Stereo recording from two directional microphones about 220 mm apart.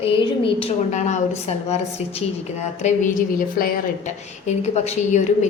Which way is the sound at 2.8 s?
30° left (ahead or behind).